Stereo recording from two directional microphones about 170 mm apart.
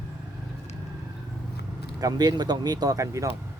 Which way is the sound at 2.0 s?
20° right (ahead or behind).